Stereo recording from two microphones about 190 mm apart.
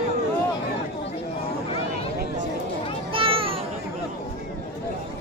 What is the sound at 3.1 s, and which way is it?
Children playing, 30° right (ahead or behind).